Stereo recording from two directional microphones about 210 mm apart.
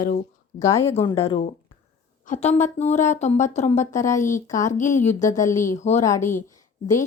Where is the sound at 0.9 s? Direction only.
25° left (ahead or behind).